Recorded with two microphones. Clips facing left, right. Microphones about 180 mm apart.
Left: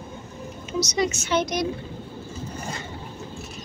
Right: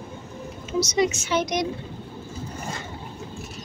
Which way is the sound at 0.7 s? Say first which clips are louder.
Right 2 dB; 20° right (ahead or behind).